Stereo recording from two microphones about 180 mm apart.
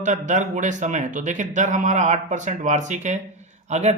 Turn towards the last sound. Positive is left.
turn(degrees=-40)  # may be behind; listen again after turning